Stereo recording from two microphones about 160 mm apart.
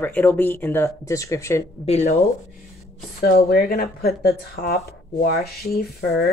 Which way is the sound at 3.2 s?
75° left (ahead or behind).